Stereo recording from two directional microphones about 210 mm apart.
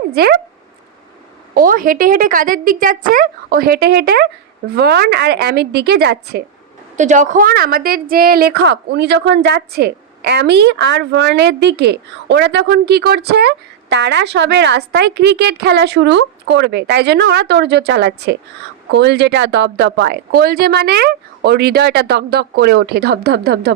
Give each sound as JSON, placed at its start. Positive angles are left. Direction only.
{"t": 0.1, "sound": "speech", "side_deg": -50}
{"t": 1.5, "sound": "a woman's voice", "side_deg": -40}
{"t": 6.9, "sound": "a woman's voice", "side_deg": -35}